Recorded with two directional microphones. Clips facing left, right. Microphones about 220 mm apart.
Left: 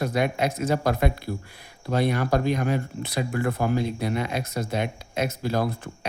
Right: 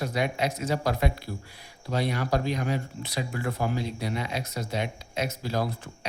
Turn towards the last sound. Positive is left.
turn(degrees=55)  # may be behind; listen again after turning